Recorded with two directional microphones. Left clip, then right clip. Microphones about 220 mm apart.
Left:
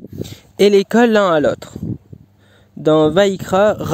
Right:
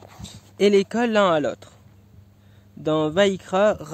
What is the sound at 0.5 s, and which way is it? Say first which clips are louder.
Speech: left 7 dB; 45° left (ahead or behind).